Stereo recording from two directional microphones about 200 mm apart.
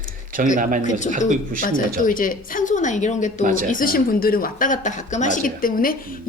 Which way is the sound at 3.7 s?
45° left (ahead or behind).